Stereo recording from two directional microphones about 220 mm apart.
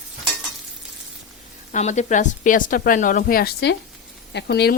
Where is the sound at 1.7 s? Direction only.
35° left (ahead or behind).